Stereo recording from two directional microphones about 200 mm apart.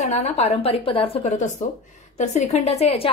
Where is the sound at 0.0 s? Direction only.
35° left (ahead or behind).